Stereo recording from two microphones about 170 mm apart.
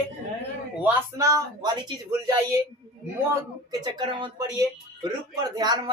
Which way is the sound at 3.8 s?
25° right (ahead or behind).